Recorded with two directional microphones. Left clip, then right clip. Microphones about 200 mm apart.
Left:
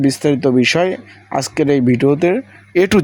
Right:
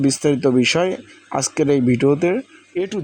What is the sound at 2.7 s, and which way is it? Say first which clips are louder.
Speech: left 10 dB; 30° left (ahead or behind).